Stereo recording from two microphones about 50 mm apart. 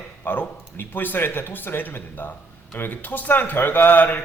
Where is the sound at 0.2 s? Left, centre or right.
Left.